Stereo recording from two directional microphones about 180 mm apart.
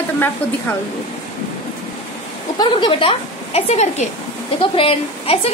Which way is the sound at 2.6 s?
25° left (ahead or behind).